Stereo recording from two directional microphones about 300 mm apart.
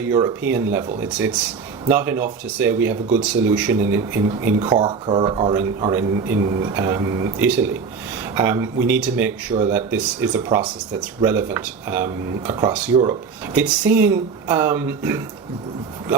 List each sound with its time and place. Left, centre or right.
0.0 s speech: centre
12.0 s speech: centre